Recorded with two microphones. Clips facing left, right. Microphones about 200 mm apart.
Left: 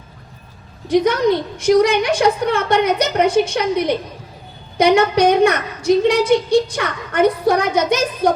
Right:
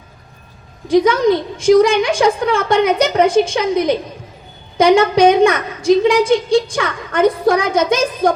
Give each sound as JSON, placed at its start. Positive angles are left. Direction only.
{"t": 0.9, "sound": "a woman's voice", "side_deg": 60}